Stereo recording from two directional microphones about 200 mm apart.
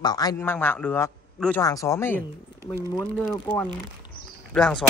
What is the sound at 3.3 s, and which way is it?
Speech, 5° left (ahead or behind).